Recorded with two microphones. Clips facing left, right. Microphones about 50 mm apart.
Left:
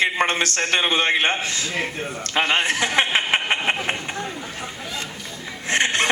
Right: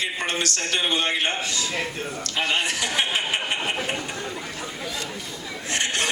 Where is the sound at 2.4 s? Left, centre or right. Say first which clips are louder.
Left 5 dB; left.